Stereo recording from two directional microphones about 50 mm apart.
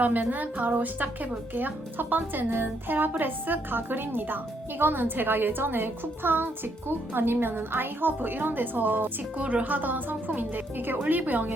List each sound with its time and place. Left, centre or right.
0.0 s a woman's voice: right
9.4 s a woman's voice: right